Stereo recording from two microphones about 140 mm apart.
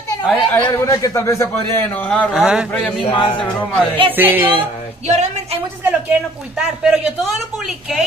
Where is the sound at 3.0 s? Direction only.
35° left (ahead or behind).